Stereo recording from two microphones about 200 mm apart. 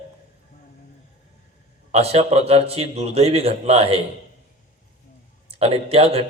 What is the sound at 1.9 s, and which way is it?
A man's voice, 30° right (ahead or behind).